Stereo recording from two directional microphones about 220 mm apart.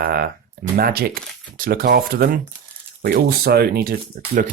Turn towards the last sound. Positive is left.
turn(degrees=-35)  # may be behind; listen again after turning